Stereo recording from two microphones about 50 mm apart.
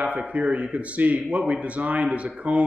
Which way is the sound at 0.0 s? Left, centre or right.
Right.